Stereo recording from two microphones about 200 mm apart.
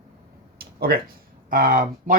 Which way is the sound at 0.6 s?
50° right (ahead or behind).